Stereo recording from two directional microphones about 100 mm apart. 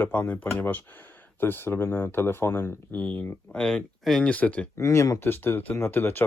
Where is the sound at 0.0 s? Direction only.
15° left (ahead or behind).